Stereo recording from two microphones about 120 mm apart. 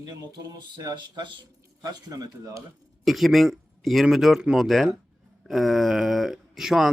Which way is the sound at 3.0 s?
Centre (ahead or behind).